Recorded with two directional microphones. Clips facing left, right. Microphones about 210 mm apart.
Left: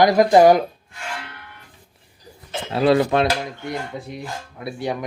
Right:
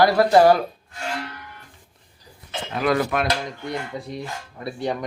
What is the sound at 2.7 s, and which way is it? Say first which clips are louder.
Speech: left 5 dB; 30° left (ahead or behind).